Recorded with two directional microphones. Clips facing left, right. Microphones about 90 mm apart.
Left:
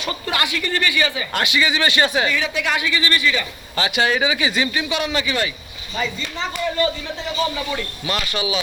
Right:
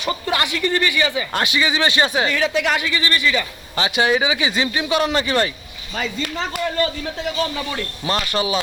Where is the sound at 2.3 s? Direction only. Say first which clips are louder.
Right 3 dB; 40° right (ahead or behind).